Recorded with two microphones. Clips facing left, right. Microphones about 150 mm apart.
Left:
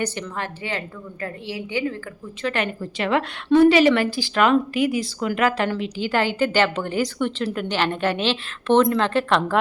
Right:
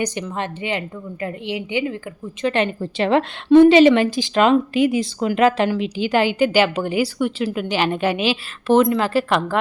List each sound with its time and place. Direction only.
0.0 s a woman's voice: 15° right (ahead or behind)